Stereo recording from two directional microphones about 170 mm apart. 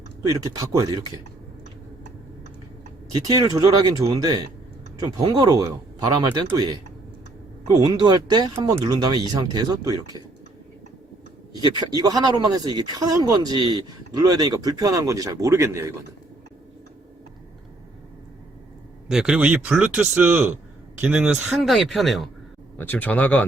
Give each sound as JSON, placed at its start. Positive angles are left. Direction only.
{"t": 0.3, "sound": "speech", "side_deg": -20}
{"t": 3.2, "sound": "speech", "side_deg": -20}
{"t": 11.5, "sound": "speech", "side_deg": -25}
{"t": 19.0, "sound": "a man's voice", "side_deg": 0}